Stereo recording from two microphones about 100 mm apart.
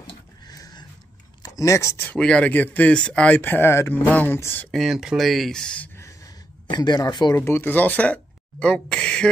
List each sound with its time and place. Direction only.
0.5 s a sound: 40° left (ahead or behind)
1.4 s speech: 35° left (ahead or behind)
2.0 s speech: 10° left (ahead or behind)
4.6 s speech: centre (ahead or behind)
5.9 s a sound: 30° left (ahead or behind)
6.7 s speech: 45° left (ahead or behind)
7.3 s speech: 25° left (ahead or behind)